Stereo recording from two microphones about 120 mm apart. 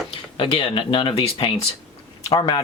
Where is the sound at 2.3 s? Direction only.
40° left (ahead or behind).